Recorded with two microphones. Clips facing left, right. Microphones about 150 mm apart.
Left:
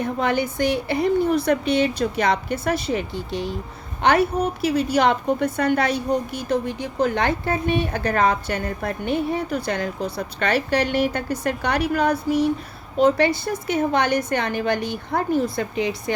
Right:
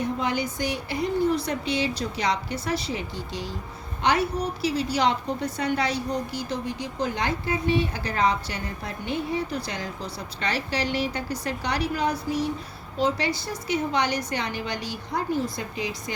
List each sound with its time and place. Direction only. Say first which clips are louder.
0.0 s a woman's voice: left 4 dB; 60° left (ahead or behind)